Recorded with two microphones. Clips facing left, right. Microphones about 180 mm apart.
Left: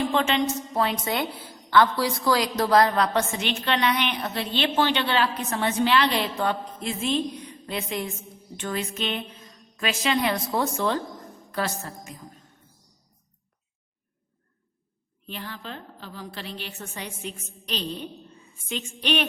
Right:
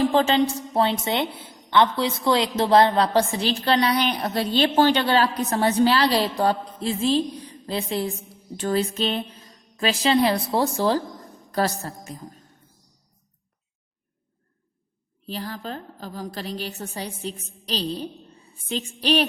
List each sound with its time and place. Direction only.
0.0 s a woman's voice: 35° right (ahead or behind)
15.3 s a woman's voice: 35° right (ahead or behind)